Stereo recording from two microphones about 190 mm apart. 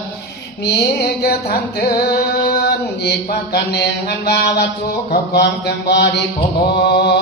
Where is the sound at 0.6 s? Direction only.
55° left (ahead or behind).